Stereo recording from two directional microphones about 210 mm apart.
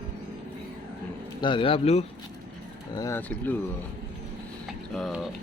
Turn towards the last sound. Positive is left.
turn(degrees=0)  # may be behind; listen again after turning